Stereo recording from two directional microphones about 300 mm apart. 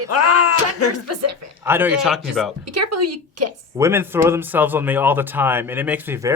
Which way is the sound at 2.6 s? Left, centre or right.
Right.